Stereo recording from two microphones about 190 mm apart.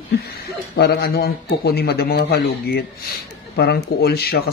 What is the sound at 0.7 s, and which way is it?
Speech, 55° left (ahead or behind).